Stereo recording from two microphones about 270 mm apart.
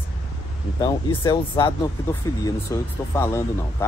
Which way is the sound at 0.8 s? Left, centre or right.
Centre.